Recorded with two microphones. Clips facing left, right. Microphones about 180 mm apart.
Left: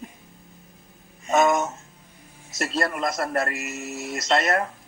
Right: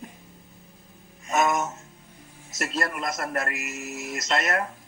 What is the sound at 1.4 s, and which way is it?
Music, 30° left (ahead or behind).